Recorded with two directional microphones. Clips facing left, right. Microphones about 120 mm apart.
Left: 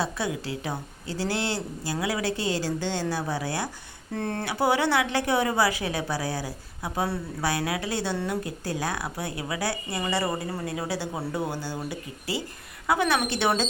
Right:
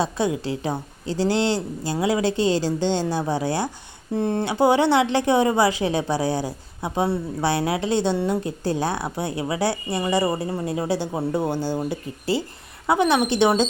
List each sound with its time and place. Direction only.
0.0 s a woman's voice: 25° right (ahead or behind)
4.1 s a woman's voice: 15° right (ahead or behind)